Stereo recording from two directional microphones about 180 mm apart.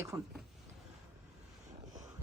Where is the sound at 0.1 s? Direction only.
20° right (ahead or behind).